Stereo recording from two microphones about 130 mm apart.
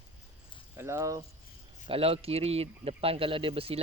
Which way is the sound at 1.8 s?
45° right (ahead or behind).